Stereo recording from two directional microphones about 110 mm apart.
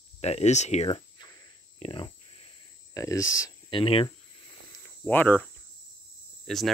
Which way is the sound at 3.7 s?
55° left (ahead or behind).